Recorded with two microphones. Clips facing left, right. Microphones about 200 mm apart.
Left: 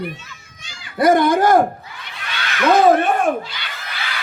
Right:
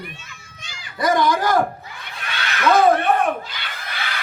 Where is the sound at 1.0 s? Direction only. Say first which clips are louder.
Left 5 dB; 55° left (ahead or behind).